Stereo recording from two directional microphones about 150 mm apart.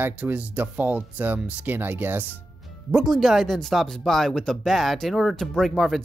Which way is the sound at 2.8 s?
Centre (ahead or behind).